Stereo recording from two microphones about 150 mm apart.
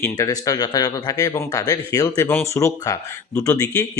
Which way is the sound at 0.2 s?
25° left (ahead or behind).